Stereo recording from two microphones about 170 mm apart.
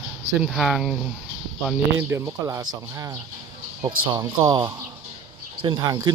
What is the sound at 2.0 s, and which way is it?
Speech, 15° right (ahead or behind).